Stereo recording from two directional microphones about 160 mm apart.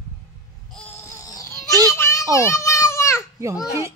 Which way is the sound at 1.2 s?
20° left (ahead or behind).